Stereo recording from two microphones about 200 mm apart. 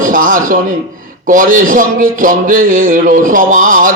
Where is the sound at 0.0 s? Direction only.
40° right (ahead or behind).